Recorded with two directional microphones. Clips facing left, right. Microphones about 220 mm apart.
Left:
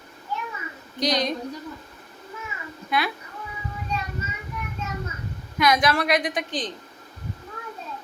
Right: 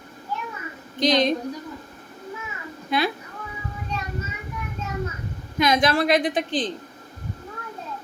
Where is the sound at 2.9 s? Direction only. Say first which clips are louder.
Right 3 dB; 25° right (ahead or behind).